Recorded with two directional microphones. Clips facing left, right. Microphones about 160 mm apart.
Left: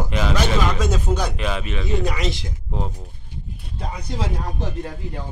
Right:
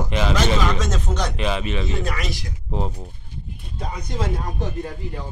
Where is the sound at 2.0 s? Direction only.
20° left (ahead or behind).